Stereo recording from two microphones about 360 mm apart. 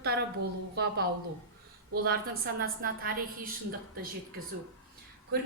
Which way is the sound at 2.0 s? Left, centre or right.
Right.